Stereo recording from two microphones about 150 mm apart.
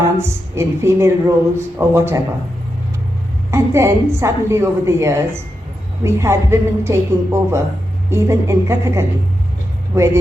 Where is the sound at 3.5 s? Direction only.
20° right (ahead or behind).